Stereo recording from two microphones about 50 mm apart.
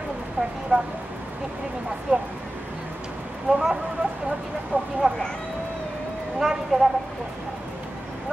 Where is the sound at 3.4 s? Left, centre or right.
Centre.